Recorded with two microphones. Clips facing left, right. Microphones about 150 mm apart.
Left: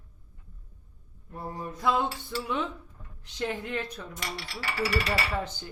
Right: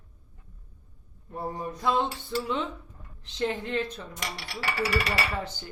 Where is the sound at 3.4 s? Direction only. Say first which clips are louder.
Right 3 dB; 25° right (ahead or behind).